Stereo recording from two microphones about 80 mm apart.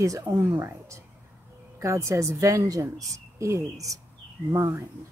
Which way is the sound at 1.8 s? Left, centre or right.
Right.